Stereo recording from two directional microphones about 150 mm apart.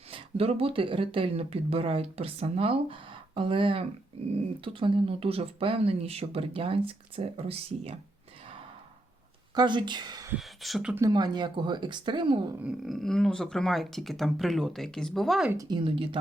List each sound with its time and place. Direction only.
0.1 s speech: 40° right (ahead or behind)
9.6 s speech: 30° right (ahead or behind)
10.4 s speech: centre (ahead or behind)
11.1 s speech: 30° right (ahead or behind)
12.6 s speech: centre (ahead or behind)
15.5 s speech: 30° right (ahead or behind)